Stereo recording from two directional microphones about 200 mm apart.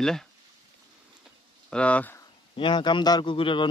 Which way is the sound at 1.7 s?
5° left (ahead or behind).